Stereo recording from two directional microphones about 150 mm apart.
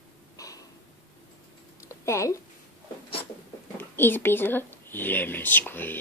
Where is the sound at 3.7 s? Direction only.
15° left (ahead or behind).